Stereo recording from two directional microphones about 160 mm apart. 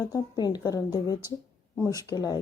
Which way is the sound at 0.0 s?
25° left (ahead or behind).